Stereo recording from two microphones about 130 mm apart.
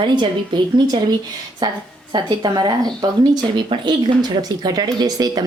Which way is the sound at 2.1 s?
35° right (ahead or behind).